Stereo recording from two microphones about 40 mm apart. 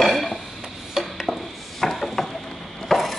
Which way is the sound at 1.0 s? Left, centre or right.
Centre.